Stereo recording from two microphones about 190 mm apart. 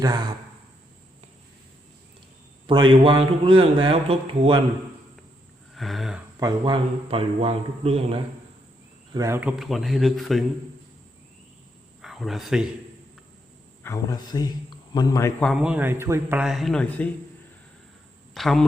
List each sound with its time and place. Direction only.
0.0 s a man's voice: 20° right (ahead or behind)
2.6 s a man's voice: 25° right (ahead or behind)
5.7 s a sound: centre (ahead or behind)
6.4 s a man's voice: 25° right (ahead or behind)
9.1 s speech: 15° right (ahead or behind)
12.0 s speech: centre (ahead or behind)
13.8 s a man's voice: 15° left (ahead or behind)
15.4 s speech: centre (ahead or behind)
16.4 s speech: centre (ahead or behind)
18.3 s speech: centre (ahead or behind)